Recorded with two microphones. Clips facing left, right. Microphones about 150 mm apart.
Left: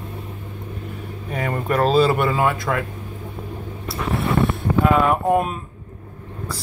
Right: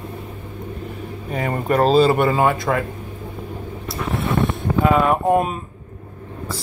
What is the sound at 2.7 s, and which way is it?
Speech, 20° right (ahead or behind).